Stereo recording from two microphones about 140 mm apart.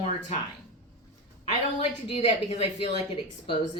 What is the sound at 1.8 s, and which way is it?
Speech, 45° left (ahead or behind).